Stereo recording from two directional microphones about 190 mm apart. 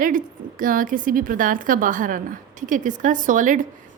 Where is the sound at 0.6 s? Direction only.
45° right (ahead or behind).